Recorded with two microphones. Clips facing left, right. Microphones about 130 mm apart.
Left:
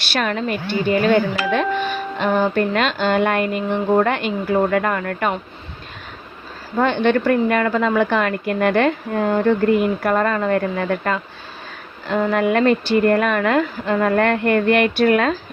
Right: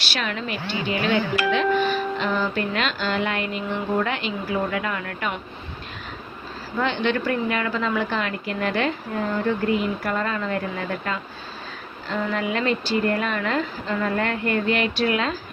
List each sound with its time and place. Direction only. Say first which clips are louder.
0.0 s a woman's voice: left 7 dB; 50° left (ahead or behind)
6.7 s a woman's voice: left 6 dB; 50° left (ahead or behind)